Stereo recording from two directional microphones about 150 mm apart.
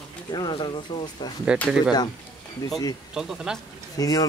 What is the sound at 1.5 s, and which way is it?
Speech, 5° right (ahead or behind).